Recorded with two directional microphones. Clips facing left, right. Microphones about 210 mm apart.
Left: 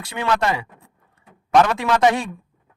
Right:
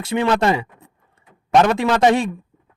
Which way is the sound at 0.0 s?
25° right (ahead or behind).